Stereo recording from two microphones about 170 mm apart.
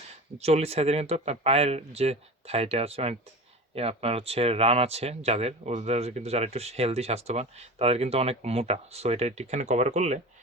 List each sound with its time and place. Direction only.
0.3 s speech: 40° right (ahead or behind)